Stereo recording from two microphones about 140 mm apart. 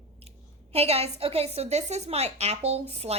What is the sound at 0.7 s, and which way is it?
A woman's voice, 45° right (ahead or behind).